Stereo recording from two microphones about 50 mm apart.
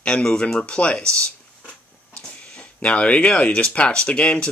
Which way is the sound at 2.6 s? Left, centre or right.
Left.